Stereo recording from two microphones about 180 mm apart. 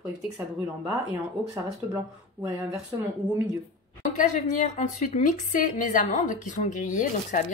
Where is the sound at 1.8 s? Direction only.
20° right (ahead or behind).